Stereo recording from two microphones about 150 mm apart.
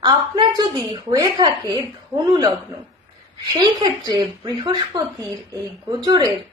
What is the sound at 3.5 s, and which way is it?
A woman's voice, 30° right (ahead or behind).